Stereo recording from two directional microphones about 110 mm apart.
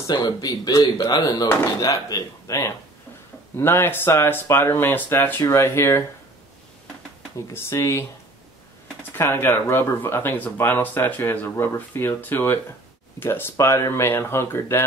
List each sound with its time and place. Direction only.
0.0 s speech: 40° left (ahead or behind)
7.5 s speech: 25° left (ahead or behind)
9.1 s speech: 20° left (ahead or behind)